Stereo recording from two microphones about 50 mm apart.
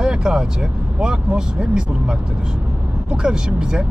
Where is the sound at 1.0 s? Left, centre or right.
Centre.